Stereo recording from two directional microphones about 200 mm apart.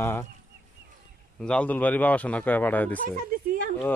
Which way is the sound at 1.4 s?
5° left (ahead or behind).